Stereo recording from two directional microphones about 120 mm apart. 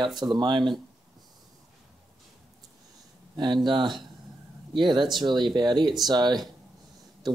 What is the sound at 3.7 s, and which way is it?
A man's voice, 40° right (ahead or behind).